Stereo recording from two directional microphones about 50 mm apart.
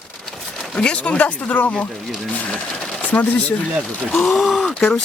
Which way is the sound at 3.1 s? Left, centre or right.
Left.